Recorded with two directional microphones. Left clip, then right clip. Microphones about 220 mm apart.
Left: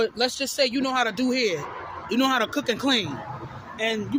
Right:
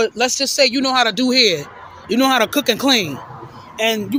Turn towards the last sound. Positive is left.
turn(degrees=-40)  # may be behind; listen again after turning